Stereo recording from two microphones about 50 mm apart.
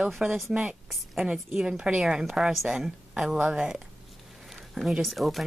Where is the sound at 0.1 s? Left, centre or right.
Centre.